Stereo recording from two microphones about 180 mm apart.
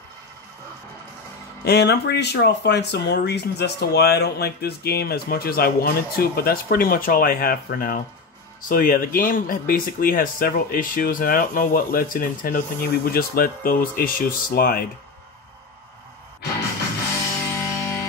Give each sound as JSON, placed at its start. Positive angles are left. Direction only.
{"t": 1.6, "sound": "speech", "side_deg": 65}
{"t": 17.6, "sound": "music", "side_deg": 15}